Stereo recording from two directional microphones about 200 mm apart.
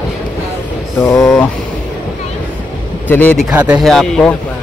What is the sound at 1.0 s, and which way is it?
Speech, 15° left (ahead or behind).